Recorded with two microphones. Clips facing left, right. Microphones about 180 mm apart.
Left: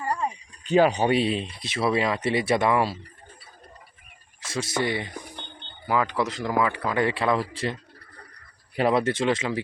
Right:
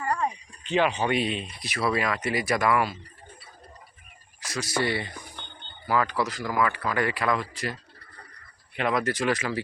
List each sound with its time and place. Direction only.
0.6 s speech: 40° left (ahead or behind)
4.4 s speech: 25° left (ahead or behind)